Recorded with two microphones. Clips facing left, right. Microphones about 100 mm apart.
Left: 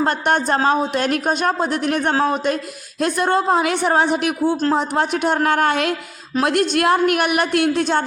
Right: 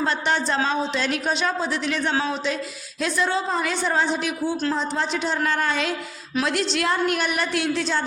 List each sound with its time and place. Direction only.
0.0 s a woman's voice: 50° left (ahead or behind)